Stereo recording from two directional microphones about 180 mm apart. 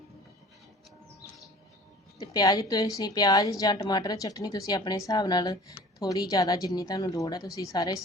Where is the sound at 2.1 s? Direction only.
20° left (ahead or behind).